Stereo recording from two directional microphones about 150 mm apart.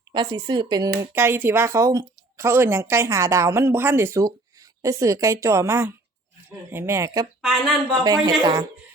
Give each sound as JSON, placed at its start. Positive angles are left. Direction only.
{"t": 0.1, "sound": "a woman's voice", "side_deg": -30}
{"t": 1.1, "sound": "a woman's voice", "side_deg": -15}
{"t": 7.4, "sound": "speech", "side_deg": 0}
{"t": 7.9, "sound": "a woman's voice", "side_deg": -25}